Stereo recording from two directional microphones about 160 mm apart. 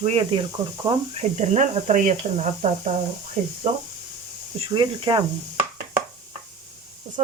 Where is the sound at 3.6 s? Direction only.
45° right (ahead or behind).